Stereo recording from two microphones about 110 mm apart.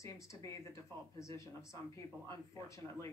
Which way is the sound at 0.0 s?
30° left (ahead or behind).